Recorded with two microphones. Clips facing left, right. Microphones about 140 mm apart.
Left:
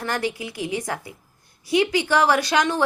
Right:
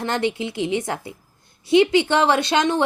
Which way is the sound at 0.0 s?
25° right (ahead or behind).